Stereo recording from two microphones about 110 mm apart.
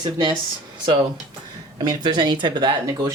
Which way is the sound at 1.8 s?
40° right (ahead or behind).